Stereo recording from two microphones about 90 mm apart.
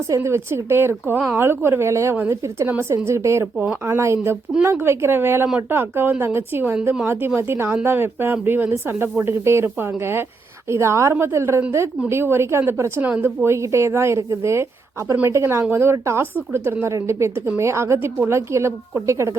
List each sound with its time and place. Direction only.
0.1 s a woman's voice: 30° right (ahead or behind)